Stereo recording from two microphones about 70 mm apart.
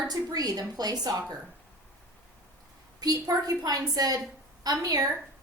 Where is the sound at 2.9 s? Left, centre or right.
Right.